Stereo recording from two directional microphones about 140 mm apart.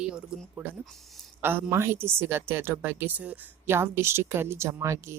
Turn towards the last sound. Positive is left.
turn(degrees=-20)  # may be behind; listen again after turning